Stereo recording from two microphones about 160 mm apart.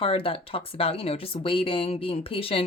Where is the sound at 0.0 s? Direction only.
35° left (ahead or behind).